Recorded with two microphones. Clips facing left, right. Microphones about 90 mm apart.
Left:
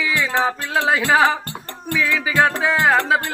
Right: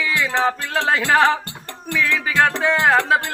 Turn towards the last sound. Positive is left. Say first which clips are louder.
# even
turn(degrees=0)  # may be behind; listen again after turning